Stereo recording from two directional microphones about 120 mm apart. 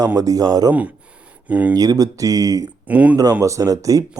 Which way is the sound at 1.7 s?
30° right (ahead or behind).